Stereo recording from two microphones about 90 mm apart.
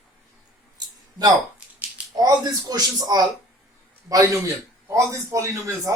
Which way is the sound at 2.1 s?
45° right (ahead or behind).